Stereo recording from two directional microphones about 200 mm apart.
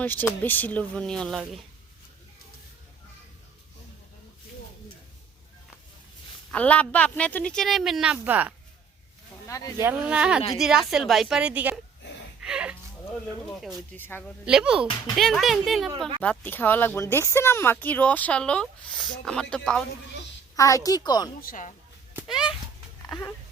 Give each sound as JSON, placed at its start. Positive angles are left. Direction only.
{"t": 0.0, "sound": "speech", "side_deg": 10}
{"t": 6.5, "sound": "a woman's voice", "side_deg": 5}
{"t": 9.5, "sound": "speech", "side_deg": 15}
{"t": 9.8, "sound": "a woman's voice", "side_deg": -5}
{"t": 12.4, "sound": "a sound", "side_deg": -5}
{"t": 13.2, "sound": "a woman's voice", "side_deg": 0}
{"t": 14.4, "sound": "a woman's voice", "side_deg": -5}
{"t": 20.6, "sound": "a woman's voice", "side_deg": 15}
{"t": 21.4, "sound": "a woman's voice", "side_deg": 40}
{"t": 22.1, "sound": "a sound", "side_deg": -5}
{"t": 23.0, "sound": "speech", "side_deg": 5}